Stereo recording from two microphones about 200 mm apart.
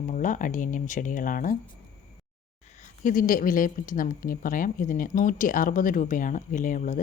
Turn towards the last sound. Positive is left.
turn(degrees=40)  # may be behind; listen again after turning